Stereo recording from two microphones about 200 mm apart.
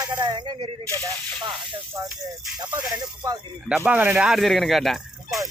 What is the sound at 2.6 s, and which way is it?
Speech, 20° right (ahead or behind).